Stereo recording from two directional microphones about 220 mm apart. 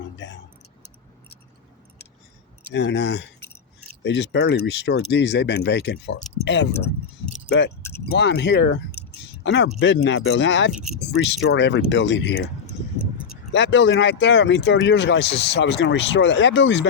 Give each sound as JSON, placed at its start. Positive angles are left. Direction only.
{"t": 0.2, "sound": "keys jangling", "side_deg": 55}
{"t": 2.7, "sound": "speech", "side_deg": 55}
{"t": 7.3, "sound": "keys jangling", "side_deg": 50}
{"t": 8.0, "sound": "speech", "side_deg": 50}
{"t": 9.1, "sound": "a sound", "side_deg": 50}
{"t": 9.8, "sound": "speech", "side_deg": 55}
{"t": 13.5, "sound": "speech", "side_deg": 55}